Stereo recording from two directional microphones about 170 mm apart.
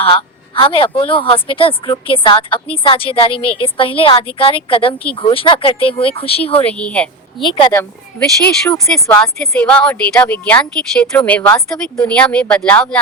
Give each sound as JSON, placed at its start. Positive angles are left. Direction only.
{"t": 0.0, "sound": "a woman's voice", "side_deg": 30}
{"t": 6.6, "sound": "speech", "side_deg": 5}
{"t": 7.4, "sound": "a woman's voice", "side_deg": 30}
{"t": 7.7, "sound": "speech", "side_deg": 10}